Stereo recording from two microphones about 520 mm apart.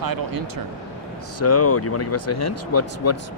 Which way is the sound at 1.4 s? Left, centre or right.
Left.